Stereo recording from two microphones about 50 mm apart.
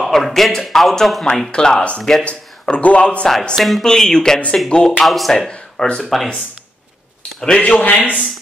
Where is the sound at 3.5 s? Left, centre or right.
Centre.